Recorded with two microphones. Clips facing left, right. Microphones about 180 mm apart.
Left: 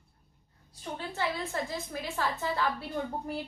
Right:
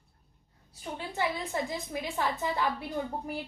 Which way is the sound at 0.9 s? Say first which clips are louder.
Right 1 dB; 15° right (ahead or behind).